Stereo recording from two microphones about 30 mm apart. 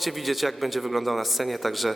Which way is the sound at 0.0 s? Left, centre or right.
Centre.